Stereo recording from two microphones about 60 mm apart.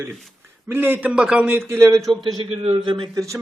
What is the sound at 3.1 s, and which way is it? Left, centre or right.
Speech, right.